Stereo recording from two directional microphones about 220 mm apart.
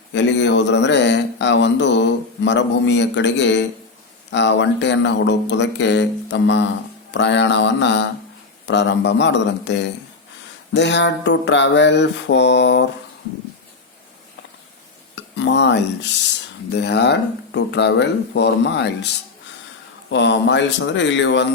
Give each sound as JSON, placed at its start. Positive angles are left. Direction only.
{"t": 0.1, "sound": "speech", "side_deg": 55}
{"t": 15.1, "sound": "speech", "side_deg": 55}
{"t": 20.1, "sound": "speech", "side_deg": 55}